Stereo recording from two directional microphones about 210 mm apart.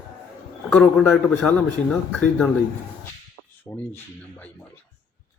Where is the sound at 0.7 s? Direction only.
5° left (ahead or behind).